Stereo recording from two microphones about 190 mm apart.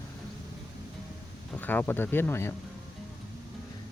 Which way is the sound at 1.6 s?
10° left (ahead or behind).